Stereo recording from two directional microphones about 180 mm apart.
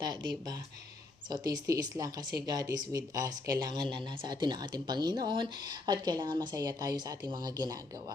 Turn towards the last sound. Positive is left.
turn(degrees=-20)  # may be behind; listen again after turning